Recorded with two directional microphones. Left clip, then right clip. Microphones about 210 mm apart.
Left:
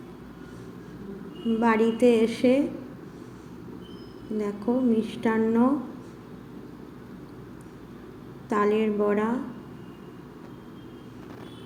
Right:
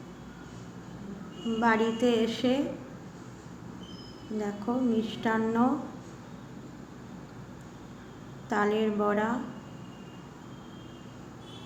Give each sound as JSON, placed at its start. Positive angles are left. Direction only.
{"t": 1.6, "sound": "a woman's voice", "side_deg": 5}
{"t": 4.4, "sound": "a woman's voice", "side_deg": 0}
{"t": 8.4, "sound": "a woman's voice", "side_deg": 5}